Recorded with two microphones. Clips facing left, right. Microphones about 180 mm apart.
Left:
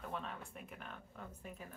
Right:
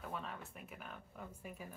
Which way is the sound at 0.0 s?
Centre (ahead or behind).